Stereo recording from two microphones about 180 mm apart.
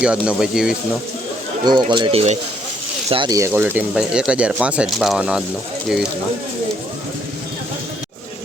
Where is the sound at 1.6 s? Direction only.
25° right (ahead or behind); by 5.4 s 5° right (ahead or behind).